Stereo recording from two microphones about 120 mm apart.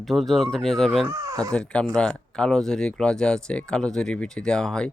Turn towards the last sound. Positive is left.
turn(degrees=5)  # may be behind; listen again after turning